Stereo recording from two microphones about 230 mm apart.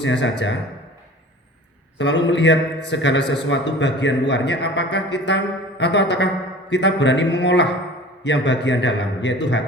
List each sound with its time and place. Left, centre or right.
0.0 s a man's voice: left
2.0 s a man's voice: left